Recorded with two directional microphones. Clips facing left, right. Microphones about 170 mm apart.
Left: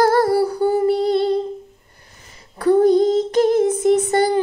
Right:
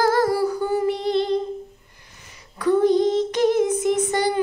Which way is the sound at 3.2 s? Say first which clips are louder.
Left 3 dB; 30° left (ahead or behind).